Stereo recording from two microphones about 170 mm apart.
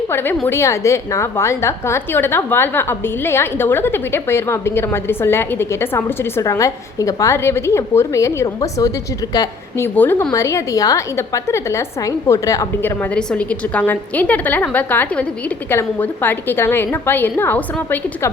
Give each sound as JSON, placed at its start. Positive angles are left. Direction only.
{"t": 0.1, "sound": "a woman's voice", "side_deg": 10}